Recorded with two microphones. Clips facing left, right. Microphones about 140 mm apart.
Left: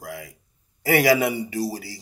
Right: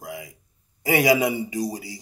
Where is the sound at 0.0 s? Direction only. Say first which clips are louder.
Even; 20° right (ahead or behind).